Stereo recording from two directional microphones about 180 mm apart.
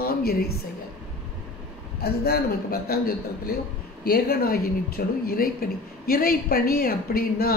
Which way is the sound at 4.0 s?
55° left (ahead or behind).